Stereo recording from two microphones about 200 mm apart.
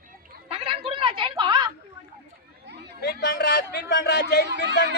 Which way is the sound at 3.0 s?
55° left (ahead or behind).